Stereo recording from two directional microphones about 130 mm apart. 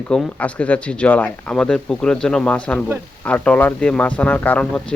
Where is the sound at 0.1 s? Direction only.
10° left (ahead or behind).